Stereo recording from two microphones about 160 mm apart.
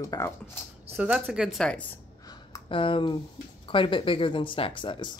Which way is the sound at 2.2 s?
25° left (ahead or behind).